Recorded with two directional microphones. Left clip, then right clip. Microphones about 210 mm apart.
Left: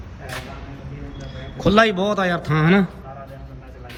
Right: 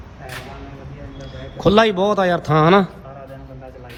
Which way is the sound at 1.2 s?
10° right (ahead or behind).